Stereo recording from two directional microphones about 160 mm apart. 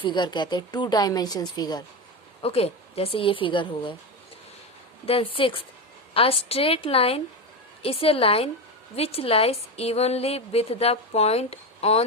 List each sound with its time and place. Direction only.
0.0 s a woman's voice: 30° left (ahead or behind)
2.4 s a woman's voice: 40° left (ahead or behind)
5.0 s a woman's voice: 35° left (ahead or behind)